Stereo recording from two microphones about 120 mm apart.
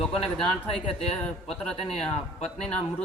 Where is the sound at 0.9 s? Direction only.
55° left (ahead or behind).